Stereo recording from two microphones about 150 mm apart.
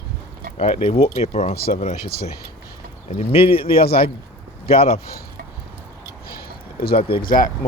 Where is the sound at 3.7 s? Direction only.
90° left.